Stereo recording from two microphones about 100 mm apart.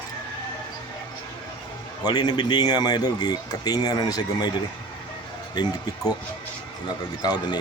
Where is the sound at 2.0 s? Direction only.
40° left (ahead or behind).